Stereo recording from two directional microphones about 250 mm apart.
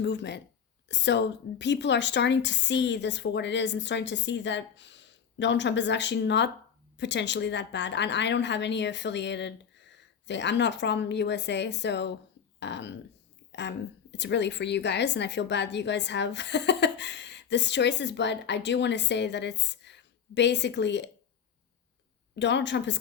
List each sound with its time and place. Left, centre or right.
0.0 s a woman's voice: left
22.4 s a woman's voice: left